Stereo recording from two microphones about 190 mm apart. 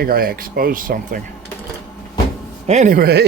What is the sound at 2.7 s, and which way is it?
Speech, 40° right (ahead or behind).